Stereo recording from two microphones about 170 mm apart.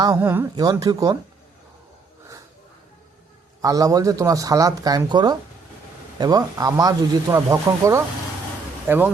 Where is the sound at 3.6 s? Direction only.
20° right (ahead or behind).